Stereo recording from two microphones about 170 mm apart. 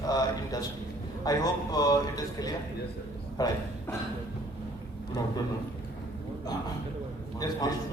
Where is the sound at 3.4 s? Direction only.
20° left (ahead or behind).